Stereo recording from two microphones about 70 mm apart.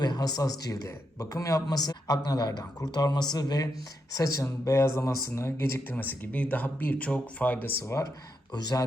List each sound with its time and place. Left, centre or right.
0.0 s speech: left
4.1 s speech: left
5.9 s speech: left
7.9 s speech: left
8.5 s speech: left